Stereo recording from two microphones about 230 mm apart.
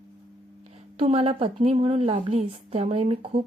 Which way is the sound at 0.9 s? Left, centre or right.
Right.